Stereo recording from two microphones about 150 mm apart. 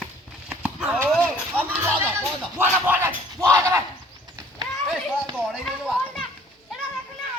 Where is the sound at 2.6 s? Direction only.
10° right (ahead or behind).